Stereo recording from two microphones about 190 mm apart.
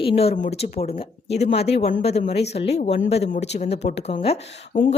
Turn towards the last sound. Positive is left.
turn(degrees=35)  # may be behind; listen again after turning